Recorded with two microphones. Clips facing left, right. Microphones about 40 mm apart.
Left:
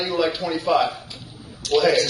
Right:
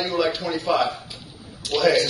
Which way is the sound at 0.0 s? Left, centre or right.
Centre.